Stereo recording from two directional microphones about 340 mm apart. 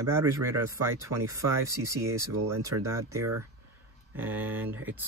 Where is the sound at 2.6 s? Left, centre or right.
Centre.